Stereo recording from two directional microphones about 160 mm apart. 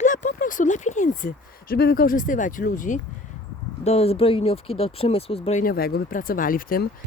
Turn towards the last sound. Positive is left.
turn(degrees=60)  # may be behind; listen again after turning